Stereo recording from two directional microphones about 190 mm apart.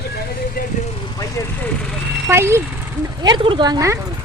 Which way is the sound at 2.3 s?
15° right (ahead or behind).